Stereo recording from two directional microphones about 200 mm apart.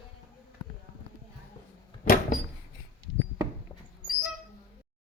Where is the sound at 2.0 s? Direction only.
45° left (ahead or behind).